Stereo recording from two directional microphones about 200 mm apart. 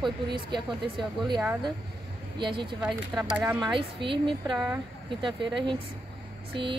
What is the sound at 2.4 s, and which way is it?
Speech, 25° right (ahead or behind).